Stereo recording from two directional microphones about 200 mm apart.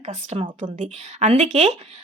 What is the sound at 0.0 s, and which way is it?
Speech, 35° right (ahead or behind).